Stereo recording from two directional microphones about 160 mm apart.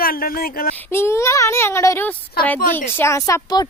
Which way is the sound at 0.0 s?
65° left (ahead or behind).